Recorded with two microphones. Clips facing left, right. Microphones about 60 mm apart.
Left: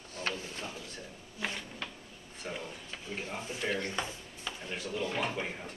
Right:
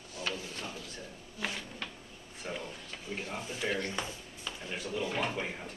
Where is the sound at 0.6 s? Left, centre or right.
Centre.